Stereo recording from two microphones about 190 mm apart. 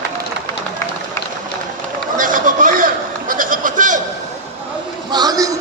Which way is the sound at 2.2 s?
45° right (ahead or behind).